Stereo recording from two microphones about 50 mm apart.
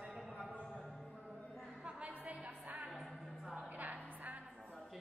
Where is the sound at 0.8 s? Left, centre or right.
Centre.